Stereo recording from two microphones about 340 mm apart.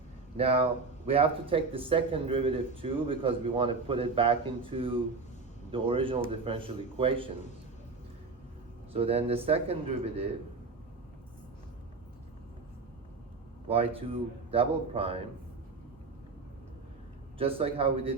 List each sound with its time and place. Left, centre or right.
0.3 s speech: centre
8.9 s speech: centre
13.7 s speech: centre
17.3 s speech: centre